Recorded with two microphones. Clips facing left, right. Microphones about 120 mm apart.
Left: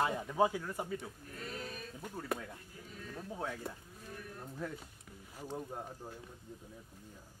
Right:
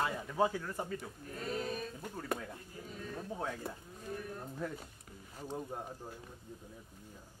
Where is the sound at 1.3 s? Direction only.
30° right (ahead or behind).